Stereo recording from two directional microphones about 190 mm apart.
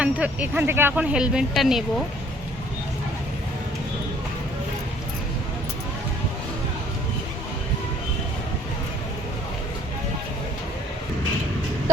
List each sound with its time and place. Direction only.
0.0 s speech: 5° right (ahead or behind)